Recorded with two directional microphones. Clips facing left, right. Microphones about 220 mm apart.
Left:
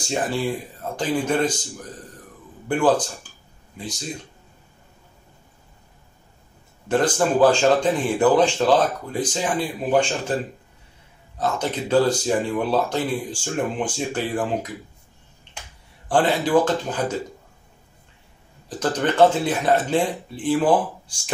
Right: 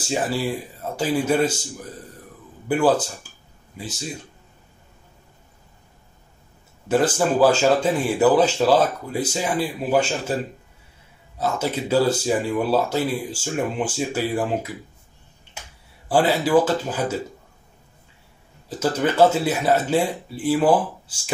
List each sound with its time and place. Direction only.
0.1 s speech: 5° right (ahead or behind)
2.7 s speech: 5° right (ahead or behind)
6.9 s speech: 5° right (ahead or behind)
11.3 s speech: 5° right (ahead or behind)
16.1 s speech: 10° right (ahead or behind)
18.7 s speech: 5° right (ahead or behind)